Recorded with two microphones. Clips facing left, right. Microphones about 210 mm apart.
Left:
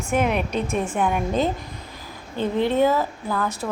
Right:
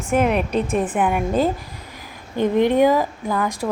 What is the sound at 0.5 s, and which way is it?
Speech, 35° right (ahead or behind).